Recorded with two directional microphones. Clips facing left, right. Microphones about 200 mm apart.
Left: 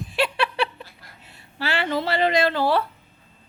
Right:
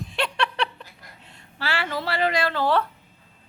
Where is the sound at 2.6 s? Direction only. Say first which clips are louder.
Left 1 dB; 10° left (ahead or behind).